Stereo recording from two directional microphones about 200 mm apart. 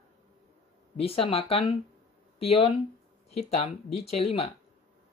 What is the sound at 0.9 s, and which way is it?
Speech, 30° left (ahead or behind).